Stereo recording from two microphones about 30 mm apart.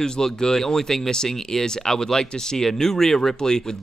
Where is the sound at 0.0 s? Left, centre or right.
Left.